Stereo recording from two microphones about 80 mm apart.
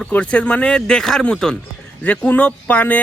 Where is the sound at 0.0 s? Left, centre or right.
Centre.